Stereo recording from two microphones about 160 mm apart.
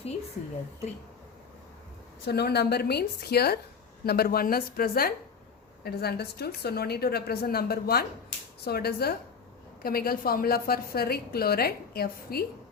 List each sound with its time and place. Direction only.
2.2 s a woman's voice: 90° left; by 5.1 s 70° left (ahead or behind)
5.8 s a woman's voice: 80° left